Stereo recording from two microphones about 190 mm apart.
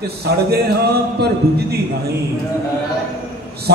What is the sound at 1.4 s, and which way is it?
Speech, 55° right (ahead or behind).